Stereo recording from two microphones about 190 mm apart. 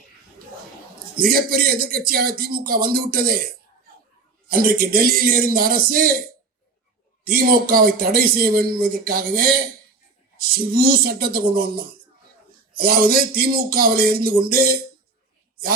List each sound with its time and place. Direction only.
1.1 s a man's voice: 50° right (ahead or behind)
4.5 s a man's voice: 50° right (ahead or behind)
7.3 s a man's voice: 50° right (ahead or behind)
12.7 s a man's voice: 50° right (ahead or behind)